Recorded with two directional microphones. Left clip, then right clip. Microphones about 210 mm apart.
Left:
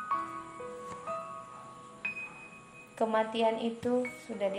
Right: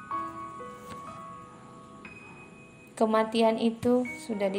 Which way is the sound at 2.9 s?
40° right (ahead or behind).